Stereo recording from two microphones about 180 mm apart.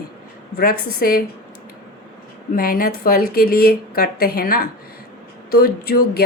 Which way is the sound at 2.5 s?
50° left (ahead or behind).